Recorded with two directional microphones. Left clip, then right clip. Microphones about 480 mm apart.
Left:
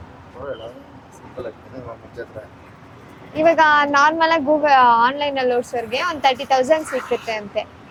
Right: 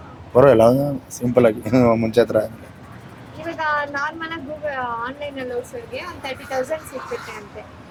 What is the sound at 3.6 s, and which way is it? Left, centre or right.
A woman's voice, left.